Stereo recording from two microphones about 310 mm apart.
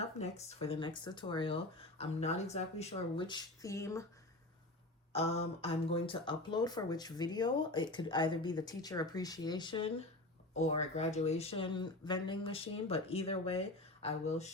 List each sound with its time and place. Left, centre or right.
0.2 s speech: left
5.1 s speech: centre